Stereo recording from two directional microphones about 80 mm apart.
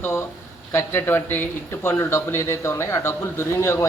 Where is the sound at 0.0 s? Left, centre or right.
Left.